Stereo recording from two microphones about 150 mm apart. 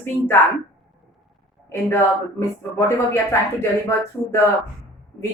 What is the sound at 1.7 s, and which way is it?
A woman's voice, 15° left (ahead or behind).